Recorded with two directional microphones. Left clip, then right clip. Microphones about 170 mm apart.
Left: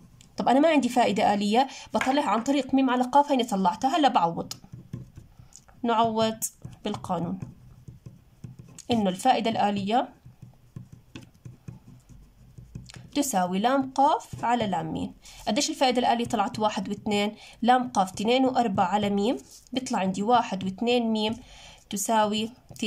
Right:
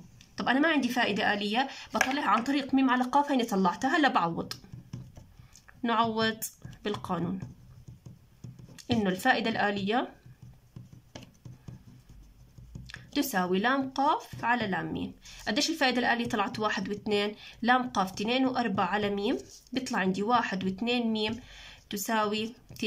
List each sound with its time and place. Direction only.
0.4 s a woman's voice: 25° left (ahead or behind)
5.8 s a woman's voice: 15° left (ahead or behind)
8.4 s speech: 15° left (ahead or behind)
12.8 s speech: 20° left (ahead or behind)